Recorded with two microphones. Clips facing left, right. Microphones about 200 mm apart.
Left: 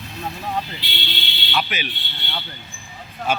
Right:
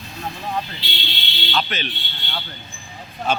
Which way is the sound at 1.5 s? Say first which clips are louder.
Even; 10° left (ahead or behind).